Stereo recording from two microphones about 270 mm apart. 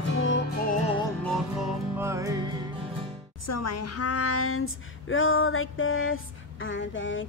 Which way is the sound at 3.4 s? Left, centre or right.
Left.